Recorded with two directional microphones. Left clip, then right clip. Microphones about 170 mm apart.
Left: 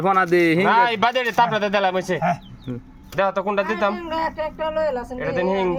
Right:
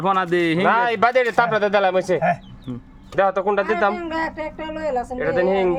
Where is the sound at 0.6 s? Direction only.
20° right (ahead or behind).